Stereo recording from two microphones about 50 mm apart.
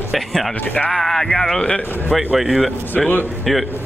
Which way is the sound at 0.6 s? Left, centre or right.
Left.